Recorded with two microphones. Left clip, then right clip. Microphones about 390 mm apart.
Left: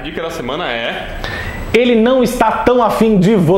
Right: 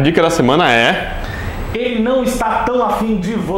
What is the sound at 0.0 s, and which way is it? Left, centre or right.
Speech, right.